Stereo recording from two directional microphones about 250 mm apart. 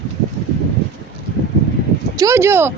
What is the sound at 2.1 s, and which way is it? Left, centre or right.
Speech, centre.